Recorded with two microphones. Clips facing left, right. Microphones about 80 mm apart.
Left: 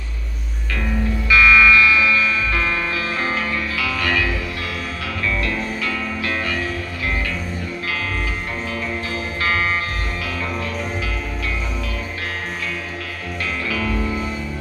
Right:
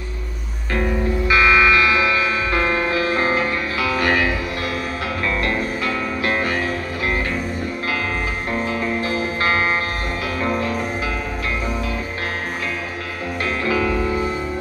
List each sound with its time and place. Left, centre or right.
1.3 s music: right
5.2 s music: right
8.7 s music: right
10.4 s music: right
13.7 s music: right